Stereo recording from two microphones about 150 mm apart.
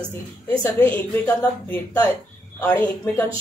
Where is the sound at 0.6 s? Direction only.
15° left (ahead or behind).